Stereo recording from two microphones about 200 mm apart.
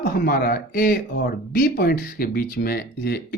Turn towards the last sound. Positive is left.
turn(degrees=50)  # may be behind; listen again after turning